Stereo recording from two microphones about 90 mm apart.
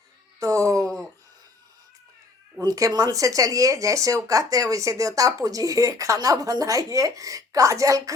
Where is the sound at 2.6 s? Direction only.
45° right (ahead or behind).